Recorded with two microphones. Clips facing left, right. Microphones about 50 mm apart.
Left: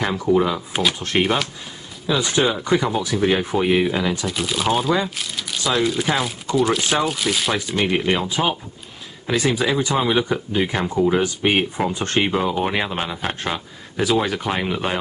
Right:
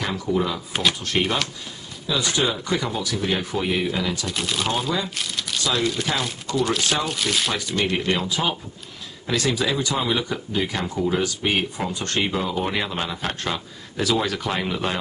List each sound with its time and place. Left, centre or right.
0.1 s speech: centre
1.2 s speech: centre
2.3 s speech: left
4.3 s speech: centre
5.1 s crumpling: centre
5.6 s speech: centre
7.5 s speech: centre